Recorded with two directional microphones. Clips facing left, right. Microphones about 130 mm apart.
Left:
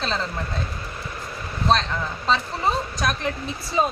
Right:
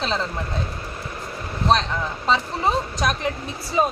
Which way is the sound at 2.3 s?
15° right (ahead or behind).